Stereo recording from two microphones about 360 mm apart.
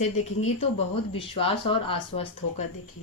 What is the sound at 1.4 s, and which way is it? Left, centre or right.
Speech, centre.